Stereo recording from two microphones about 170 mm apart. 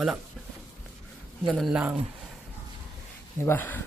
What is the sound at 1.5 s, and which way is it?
Speech, centre (ahead or behind).